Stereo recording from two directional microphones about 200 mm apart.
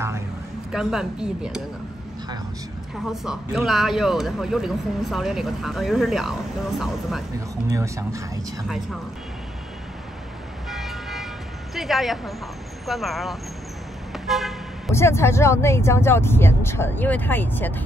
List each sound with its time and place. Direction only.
0.7 s speech: centre (ahead or behind)
3.1 s speech: centre (ahead or behind)
7.7 s speech: 15° right (ahead or behind)
10.7 s vehicle: centre (ahead or behind)
11.7 s speech: centre (ahead or behind)
14.1 s vehicle: centre (ahead or behind)
14.9 s speech: 15° left (ahead or behind)